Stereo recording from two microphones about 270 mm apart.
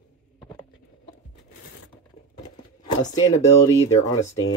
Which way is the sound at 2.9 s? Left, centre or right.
Left.